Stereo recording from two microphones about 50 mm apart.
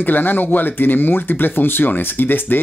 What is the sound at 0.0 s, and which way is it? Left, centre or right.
Speech, left.